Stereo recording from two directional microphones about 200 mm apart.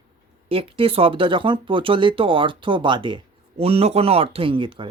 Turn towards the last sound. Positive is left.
turn(degrees=-25)  # may be behind; listen again after turning